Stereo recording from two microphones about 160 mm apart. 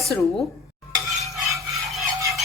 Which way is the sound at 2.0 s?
20° right (ahead or behind).